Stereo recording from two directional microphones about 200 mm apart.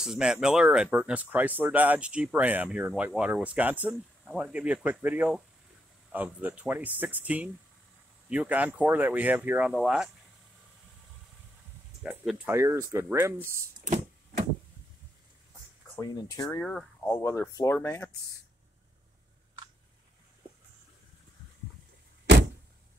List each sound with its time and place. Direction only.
0.0 s speech: 5° right (ahead or behind)
12.0 s speech: 5° right (ahead or behind)
16.0 s speech: 20° left (ahead or behind)
16.6 s speech: 5° left (ahead or behind)
22.2 s vehicle: 65° right (ahead or behind)